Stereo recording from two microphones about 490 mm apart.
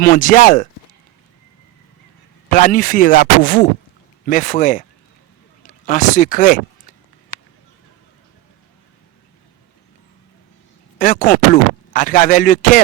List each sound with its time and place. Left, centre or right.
0.0 s a man's voice: centre
2.5 s a man's voice: centre
10.9 s a man's voice: centre